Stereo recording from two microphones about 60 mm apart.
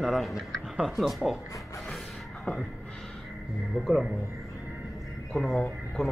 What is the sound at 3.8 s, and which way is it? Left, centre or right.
Speech, centre.